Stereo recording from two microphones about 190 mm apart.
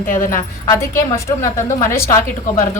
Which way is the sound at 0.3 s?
15° left (ahead or behind).